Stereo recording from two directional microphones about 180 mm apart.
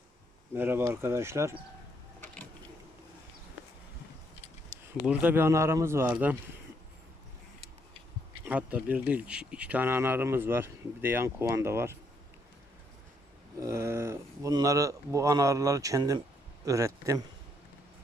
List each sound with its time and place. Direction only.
0.5 s speech: 10° right (ahead or behind)
2.2 s a sound: 10° left (ahead or behind)
5.0 s speech: 10° right (ahead or behind)
8.4 s speech: 10° right (ahead or behind)
13.6 s speech: 15° right (ahead or behind)